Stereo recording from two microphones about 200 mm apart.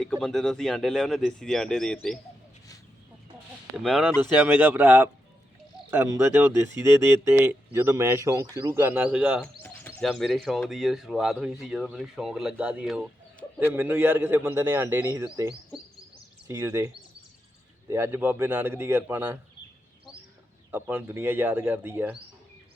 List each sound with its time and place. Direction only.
0.0 s speech: 5° left (ahead or behind)
3.8 s speech: centre (ahead or behind)
9.6 s speech: 10° left (ahead or behind)
13.4 s bird: 15° left (ahead or behind)
13.7 s speech: 10° right (ahead or behind)
16.5 s speech: 15° right (ahead or behind)
20.7 s speech: 10° right (ahead or behind)